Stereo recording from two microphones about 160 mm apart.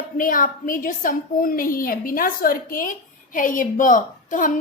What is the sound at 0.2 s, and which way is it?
A woman's voice, 60° left (ahead or behind).